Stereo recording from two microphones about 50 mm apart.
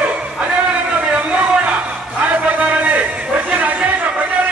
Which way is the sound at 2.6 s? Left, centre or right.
Right.